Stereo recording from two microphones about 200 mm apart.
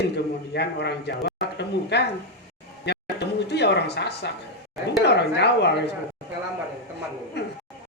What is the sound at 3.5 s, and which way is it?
A man's voice, 55° left (ahead or behind).